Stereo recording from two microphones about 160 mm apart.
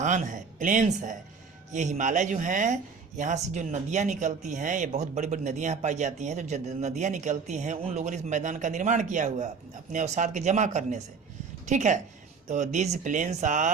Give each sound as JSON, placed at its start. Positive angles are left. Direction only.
{"t": 0.0, "sound": "a woman's voice", "side_deg": -50}